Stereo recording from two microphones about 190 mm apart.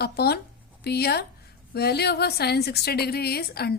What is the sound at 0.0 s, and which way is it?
A woman's voice, 55° left (ahead or behind).